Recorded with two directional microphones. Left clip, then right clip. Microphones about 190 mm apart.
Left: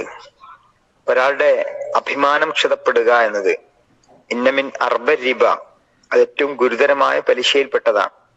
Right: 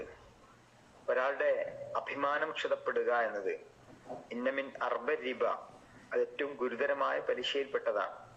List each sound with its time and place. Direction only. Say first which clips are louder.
1.0 s a man's voice: left 17 dB; 60° left (ahead or behind)